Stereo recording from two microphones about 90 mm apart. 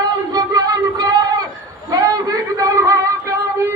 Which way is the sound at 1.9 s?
40° right (ahead or behind).